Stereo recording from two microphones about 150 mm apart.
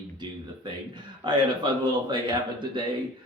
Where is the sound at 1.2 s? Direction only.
30° right (ahead or behind).